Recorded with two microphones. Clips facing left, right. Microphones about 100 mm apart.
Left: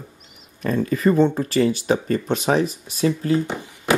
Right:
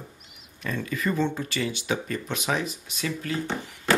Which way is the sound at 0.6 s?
40° left (ahead or behind).